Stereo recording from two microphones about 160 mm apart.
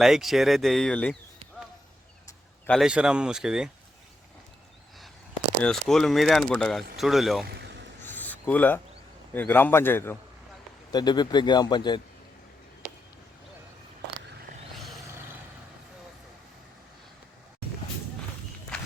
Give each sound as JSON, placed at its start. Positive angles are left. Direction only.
{"t": 0.0, "sound": "speech", "side_deg": 0}
{"t": 2.6, "sound": "speech", "side_deg": 0}
{"t": 5.6, "sound": "speech", "side_deg": 5}
{"t": 7.4, "sound": "vehicle", "side_deg": -90}
{"t": 8.0, "sound": "a sound", "side_deg": 10}
{"t": 9.3, "sound": "a man's voice", "side_deg": 10}
{"t": 10.9, "sound": "speech", "side_deg": 25}